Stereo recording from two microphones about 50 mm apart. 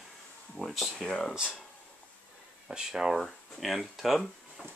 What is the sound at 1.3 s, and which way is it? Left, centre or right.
Speech, centre.